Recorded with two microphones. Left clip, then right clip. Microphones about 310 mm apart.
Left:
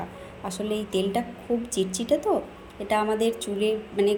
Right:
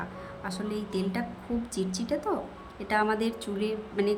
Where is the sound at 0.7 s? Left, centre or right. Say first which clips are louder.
Left 8 dB; centre.